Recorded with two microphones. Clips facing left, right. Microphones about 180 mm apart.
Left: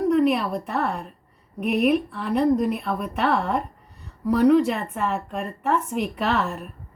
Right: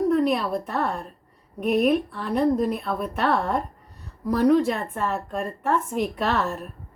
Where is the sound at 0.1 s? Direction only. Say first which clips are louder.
Left 1 dB; 5° left (ahead or behind).